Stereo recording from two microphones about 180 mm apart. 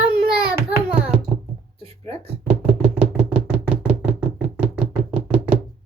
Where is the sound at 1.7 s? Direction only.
30° right (ahead or behind).